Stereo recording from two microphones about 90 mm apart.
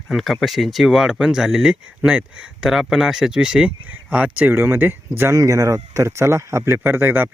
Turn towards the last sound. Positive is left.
turn(degrees=-25)  # may be behind; listen again after turning